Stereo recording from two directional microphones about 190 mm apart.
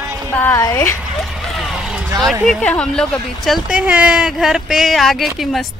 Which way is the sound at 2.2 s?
Centre (ahead or behind).